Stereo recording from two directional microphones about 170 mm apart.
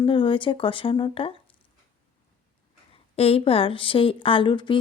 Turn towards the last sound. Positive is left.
turn(degrees=30)  # may be behind; listen again after turning